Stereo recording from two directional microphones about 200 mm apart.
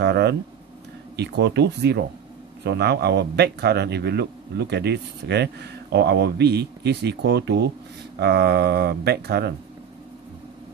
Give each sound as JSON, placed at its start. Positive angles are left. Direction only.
{"t": 0.0, "sound": "speech", "side_deg": -55}